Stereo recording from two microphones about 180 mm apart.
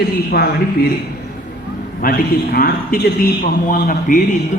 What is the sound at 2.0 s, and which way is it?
A man's voice, 55° left (ahead or behind).